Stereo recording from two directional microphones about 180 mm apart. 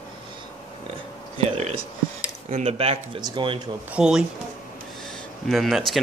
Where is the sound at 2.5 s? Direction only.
35° right (ahead or behind).